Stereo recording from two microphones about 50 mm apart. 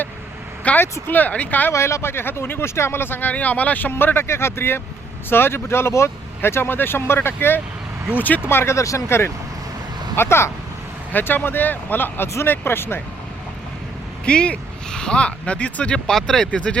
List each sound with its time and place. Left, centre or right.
0.7 s vehicle: left
1.0 s speech: left
1.7 s speech: left
3.2 s speech: left
3.9 s speech: left
8.1 s speech: left
8.4 s speech: left
8.7 s speech: left
11.1 s speech: left
14.3 s speech: left
16.0 s speech: centre
16.5 s speech: left